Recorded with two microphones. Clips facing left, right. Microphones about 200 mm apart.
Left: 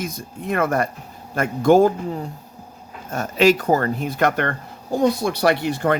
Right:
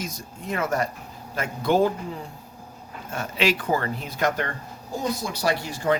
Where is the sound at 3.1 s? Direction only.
40° left (ahead or behind).